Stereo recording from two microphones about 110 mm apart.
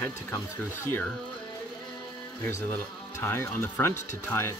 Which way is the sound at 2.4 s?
20° left (ahead or behind).